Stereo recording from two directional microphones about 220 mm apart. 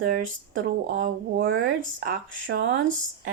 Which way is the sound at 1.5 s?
65° right (ahead or behind).